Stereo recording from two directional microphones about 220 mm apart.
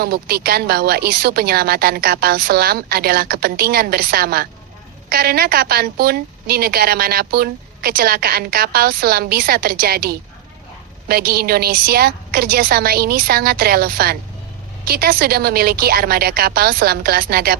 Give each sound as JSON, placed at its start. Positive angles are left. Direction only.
{"t": 0.0, "sound": "a woman's voice", "side_deg": -45}